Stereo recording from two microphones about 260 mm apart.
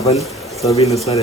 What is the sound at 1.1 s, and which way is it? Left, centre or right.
Speech, centre.